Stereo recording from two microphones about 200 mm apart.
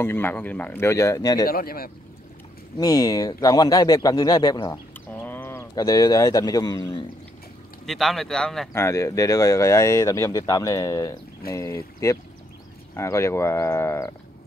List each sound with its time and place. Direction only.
0.0 s speech: 10° left (ahead or behind)
1.5 s speech: 50° left (ahead or behind)
2.8 s speech: 20° left (ahead or behind)
5.2 s speech: 10° left (ahead or behind)
7.8 s speech: centre (ahead or behind)
8.7 s speech: 15° left (ahead or behind)